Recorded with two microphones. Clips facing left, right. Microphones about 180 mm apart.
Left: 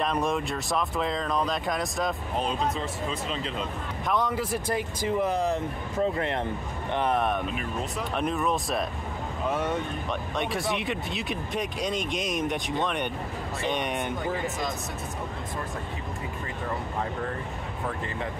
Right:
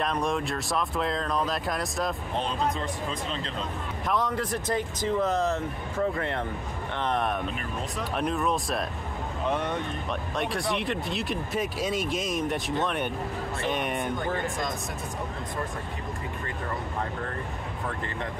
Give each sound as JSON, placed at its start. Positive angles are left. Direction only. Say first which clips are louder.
{"t": 0.0, "sound": "speech", "louder": "left 1 dB", "side_deg": 0}
{"t": 6.9, "sound": "speech", "louder": "left 3 dB", "side_deg": 10}